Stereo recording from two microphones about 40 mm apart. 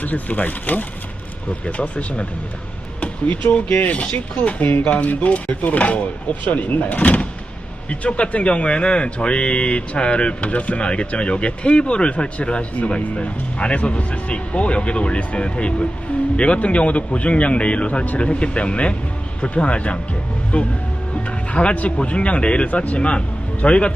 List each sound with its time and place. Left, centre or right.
0.0 s speech: left
1.6 s speech: left
22.7 s speech: left
23.0 s speech: left